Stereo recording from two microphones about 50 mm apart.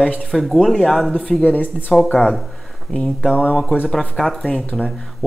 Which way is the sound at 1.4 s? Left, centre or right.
Left.